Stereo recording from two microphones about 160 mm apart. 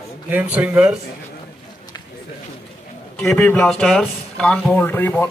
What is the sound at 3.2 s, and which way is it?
Speech, 10° left (ahead or behind).